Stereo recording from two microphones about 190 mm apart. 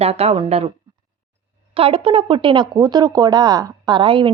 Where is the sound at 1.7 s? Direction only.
30° right (ahead or behind).